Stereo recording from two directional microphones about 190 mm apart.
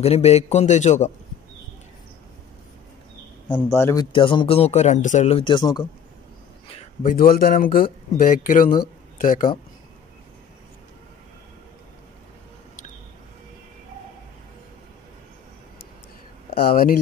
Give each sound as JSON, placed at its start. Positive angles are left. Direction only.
{"t": 0.0, "sound": "a man's voice", "side_deg": 35}
{"t": 3.4, "sound": "speech", "side_deg": 10}
{"t": 7.0, "sound": "speech", "side_deg": 50}
{"t": 16.5, "sound": "speech", "side_deg": 50}